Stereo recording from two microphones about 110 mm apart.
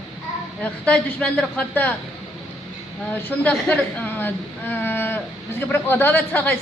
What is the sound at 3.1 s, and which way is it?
A man's voice, 15° left (ahead or behind).